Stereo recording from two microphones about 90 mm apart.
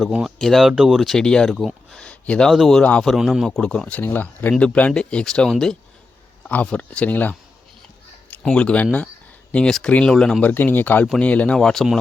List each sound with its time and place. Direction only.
0.0 s speech: 5° right (ahead or behind); by 2.5 s 15° left (ahead or behind)
2.5 s speech: 5° left (ahead or behind); by 7.3 s 20° left (ahead or behind)
8.5 s speech: 15° left (ahead or behind)
10.4 s speech: 20° left (ahead or behind); by 11.9 s 5° left (ahead or behind)